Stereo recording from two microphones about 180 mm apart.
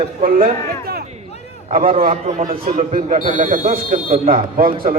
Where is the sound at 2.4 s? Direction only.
30° right (ahead or behind).